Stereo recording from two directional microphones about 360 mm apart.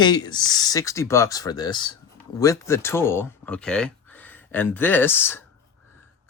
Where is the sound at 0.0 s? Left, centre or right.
Centre.